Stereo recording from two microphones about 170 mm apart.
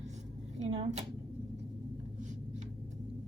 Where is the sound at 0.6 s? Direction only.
35° right (ahead or behind).